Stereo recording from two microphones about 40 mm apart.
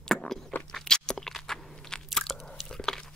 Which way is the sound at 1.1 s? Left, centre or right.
Centre.